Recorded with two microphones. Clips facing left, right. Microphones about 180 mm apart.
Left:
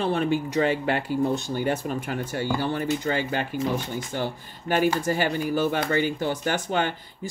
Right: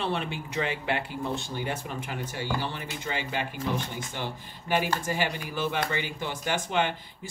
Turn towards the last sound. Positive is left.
turn(degrees=40)  # may be behind; listen again after turning